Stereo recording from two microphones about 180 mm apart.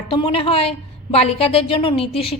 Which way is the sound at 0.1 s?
30° left (ahead or behind).